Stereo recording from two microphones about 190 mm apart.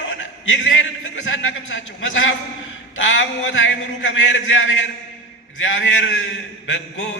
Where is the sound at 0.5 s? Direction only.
80° left.